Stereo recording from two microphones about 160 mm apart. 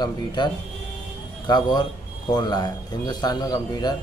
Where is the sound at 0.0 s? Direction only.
25° left (ahead or behind).